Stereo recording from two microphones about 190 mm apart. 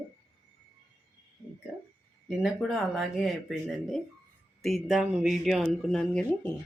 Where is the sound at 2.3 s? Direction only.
Centre (ahead or behind).